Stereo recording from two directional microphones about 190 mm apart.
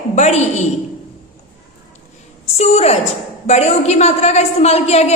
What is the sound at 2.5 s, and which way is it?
A woman's voice, 35° left (ahead or behind).